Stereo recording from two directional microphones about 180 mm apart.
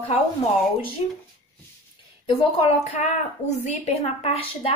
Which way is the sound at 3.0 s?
40° left (ahead or behind).